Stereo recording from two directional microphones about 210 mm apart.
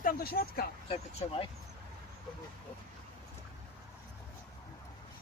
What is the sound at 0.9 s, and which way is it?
Speech, 25° left (ahead or behind).